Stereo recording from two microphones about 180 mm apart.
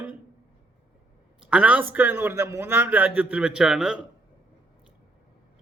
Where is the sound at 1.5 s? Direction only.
5° right (ahead or behind).